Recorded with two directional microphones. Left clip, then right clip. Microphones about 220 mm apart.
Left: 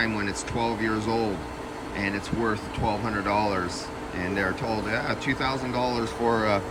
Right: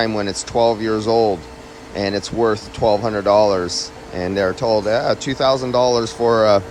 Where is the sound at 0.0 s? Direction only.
15° right (ahead or behind).